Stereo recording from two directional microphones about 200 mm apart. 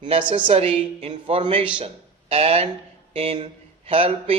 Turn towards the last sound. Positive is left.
turn(degrees=-25)  # may be behind; listen again after turning